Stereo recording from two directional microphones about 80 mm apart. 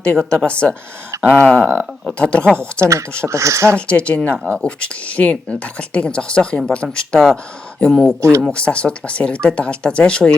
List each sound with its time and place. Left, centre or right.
0.0 s a woman's voice: centre
3.2 s speech: right
3.8 s speech: centre
8.2 s speech: right
8.4 s speech: centre